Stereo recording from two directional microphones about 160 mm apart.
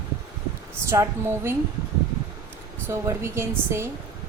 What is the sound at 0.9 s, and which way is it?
Speech, 15° right (ahead or behind).